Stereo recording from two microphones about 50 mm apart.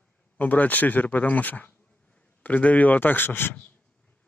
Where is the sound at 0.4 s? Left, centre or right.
Left.